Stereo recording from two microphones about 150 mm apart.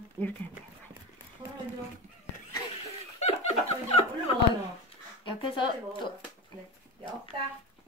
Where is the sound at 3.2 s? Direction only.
45° left (ahead or behind).